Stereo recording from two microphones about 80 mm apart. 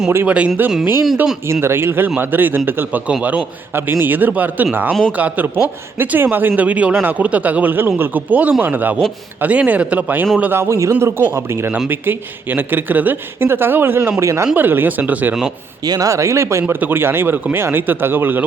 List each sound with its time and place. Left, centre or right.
0.3 s speech: centre
1.6 s speech: right
10.9 s speech: right
14.2 s speech: right
14.5 s speech: right
15.8 s speech: right